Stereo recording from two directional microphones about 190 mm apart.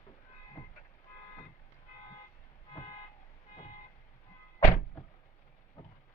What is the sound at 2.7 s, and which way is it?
Vehicle, 25° left (ahead or behind).